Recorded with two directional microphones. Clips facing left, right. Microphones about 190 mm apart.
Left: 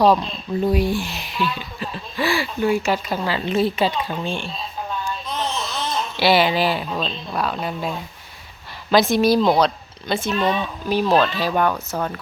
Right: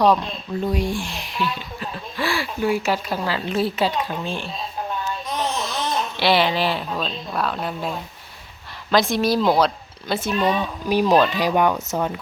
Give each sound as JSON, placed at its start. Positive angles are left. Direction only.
{"t": 0.7, "sound": "speech", "side_deg": 5}
{"t": 5.0, "sound": "a sound", "side_deg": -15}
{"t": 6.1, "sound": "speech", "side_deg": 5}